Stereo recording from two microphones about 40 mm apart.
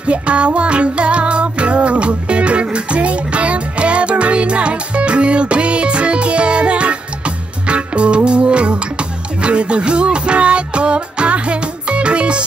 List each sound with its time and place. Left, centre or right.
0.0 s music: right